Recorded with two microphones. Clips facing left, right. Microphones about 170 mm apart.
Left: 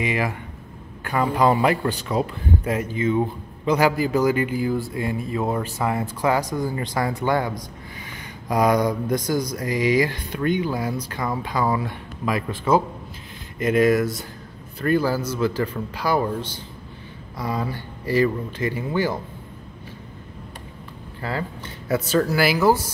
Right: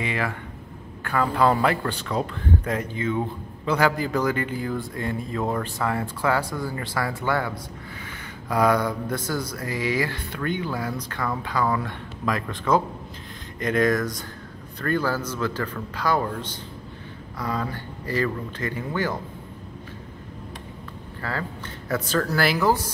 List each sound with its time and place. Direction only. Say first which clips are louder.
0.0 s speech: left 3 dB; 15° left (ahead or behind)
21.2 s speech: left 3 dB; 15° left (ahead or behind)